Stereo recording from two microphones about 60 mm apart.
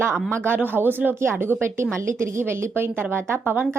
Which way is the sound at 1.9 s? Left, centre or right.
Right.